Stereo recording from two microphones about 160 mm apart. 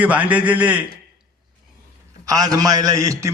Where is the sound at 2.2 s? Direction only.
20° right (ahead or behind).